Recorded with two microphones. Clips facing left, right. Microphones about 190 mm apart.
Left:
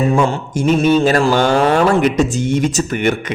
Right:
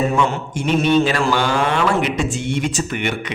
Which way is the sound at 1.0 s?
45° left (ahead or behind).